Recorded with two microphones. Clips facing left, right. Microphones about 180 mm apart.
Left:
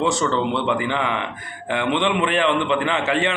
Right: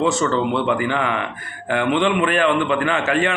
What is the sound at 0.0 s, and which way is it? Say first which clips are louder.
Speech: right 2 dB; 25° left (ahead or behind).